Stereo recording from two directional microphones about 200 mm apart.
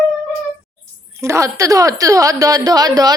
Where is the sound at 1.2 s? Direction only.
15° right (ahead or behind).